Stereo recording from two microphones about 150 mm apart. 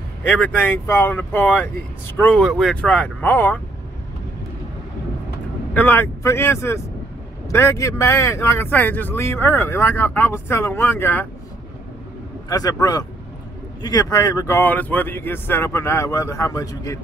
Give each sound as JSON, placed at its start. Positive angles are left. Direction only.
{"t": 0.2, "sound": "speech", "side_deg": 10}
{"t": 2.4, "sound": "speech", "side_deg": 0}
{"t": 5.7, "sound": "speech", "side_deg": 10}
{"t": 12.4, "sound": "speech", "side_deg": 25}